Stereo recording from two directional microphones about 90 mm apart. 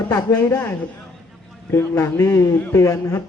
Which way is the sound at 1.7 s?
30° left (ahead or behind).